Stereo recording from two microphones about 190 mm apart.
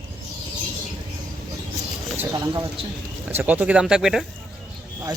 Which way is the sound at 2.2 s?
15° right (ahead or behind).